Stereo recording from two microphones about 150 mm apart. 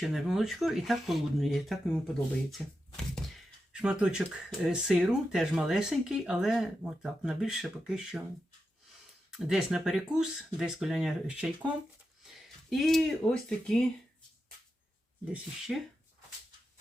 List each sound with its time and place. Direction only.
0.0 s speech: centre (ahead or behind)
9.3 s speech: 5° right (ahead or behind)
15.3 s speech: centre (ahead or behind)